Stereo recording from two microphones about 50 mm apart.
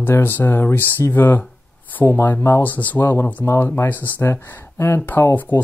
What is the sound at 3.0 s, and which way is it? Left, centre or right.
Speech, left.